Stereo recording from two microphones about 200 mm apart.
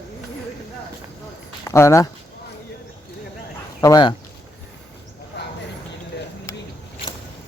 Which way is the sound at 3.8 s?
20° left (ahead or behind).